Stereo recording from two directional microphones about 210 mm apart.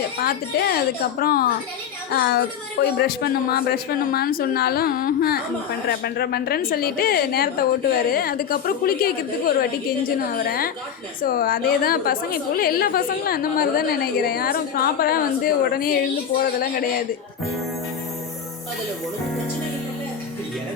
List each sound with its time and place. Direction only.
0.2 s a woman's voice: 45° left (ahead or behind)